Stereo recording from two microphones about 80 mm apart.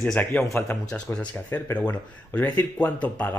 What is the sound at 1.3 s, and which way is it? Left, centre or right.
Speech, left.